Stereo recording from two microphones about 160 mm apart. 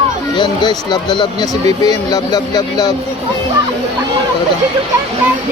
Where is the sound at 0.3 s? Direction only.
25° left (ahead or behind).